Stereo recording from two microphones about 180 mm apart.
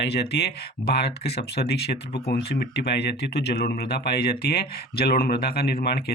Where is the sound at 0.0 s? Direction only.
65° left (ahead or behind).